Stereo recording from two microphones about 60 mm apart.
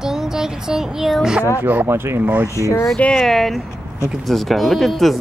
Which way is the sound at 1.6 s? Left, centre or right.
Right.